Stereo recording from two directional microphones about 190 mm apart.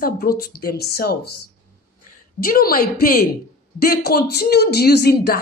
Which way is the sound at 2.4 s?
50° left (ahead or behind).